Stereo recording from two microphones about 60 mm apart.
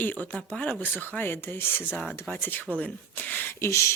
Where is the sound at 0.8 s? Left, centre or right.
Left.